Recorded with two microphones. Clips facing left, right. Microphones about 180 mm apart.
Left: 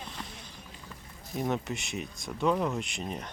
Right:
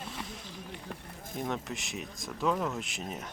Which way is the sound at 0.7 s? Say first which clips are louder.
Right 5 dB; 65° right (ahead or behind).